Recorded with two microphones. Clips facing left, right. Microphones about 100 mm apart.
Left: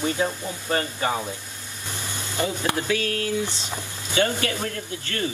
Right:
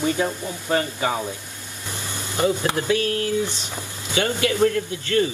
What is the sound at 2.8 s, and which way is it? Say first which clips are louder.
Speech: right 3 dB; 25° right (ahead or behind).